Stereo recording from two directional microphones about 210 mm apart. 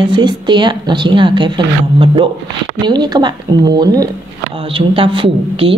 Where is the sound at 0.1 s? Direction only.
20° right (ahead or behind).